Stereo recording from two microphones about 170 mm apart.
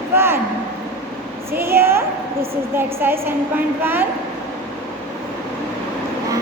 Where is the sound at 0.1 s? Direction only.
15° right (ahead or behind).